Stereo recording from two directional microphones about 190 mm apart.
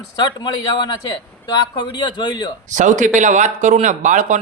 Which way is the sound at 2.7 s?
40° right (ahead or behind).